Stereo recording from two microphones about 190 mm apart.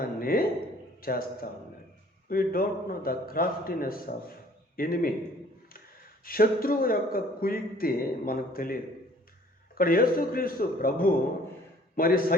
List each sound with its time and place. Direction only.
0.0 s a sound: 50° left (ahead or behind)
1.0 s a man's voice: 50° left (ahead or behind)
6.2 s a man's voice: 50° left (ahead or behind)